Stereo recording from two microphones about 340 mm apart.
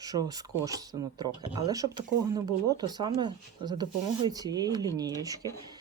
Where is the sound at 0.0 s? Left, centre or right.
Centre.